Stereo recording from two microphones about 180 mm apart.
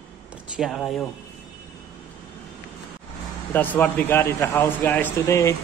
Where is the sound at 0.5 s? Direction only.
Centre (ahead or behind).